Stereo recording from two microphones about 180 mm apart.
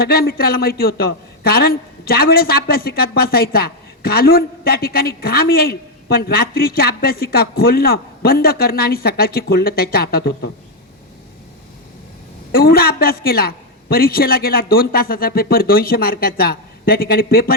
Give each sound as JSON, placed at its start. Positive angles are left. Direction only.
{"t": 0.0, "sound": "a man's voice", "side_deg": 55}
{"t": 12.5, "sound": "a man's voice", "side_deg": 55}